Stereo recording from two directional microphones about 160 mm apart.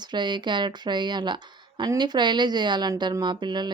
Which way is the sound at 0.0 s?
30° right (ahead or behind).